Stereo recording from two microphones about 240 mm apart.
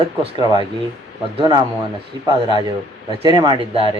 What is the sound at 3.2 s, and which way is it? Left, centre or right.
Speech, centre.